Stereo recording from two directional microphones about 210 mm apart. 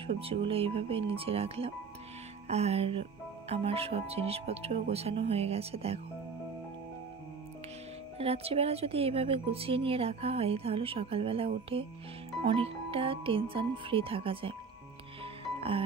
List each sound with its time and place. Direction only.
0.0 s speech: 25° right (ahead or behind)
8.2 s speech: 30° right (ahead or behind)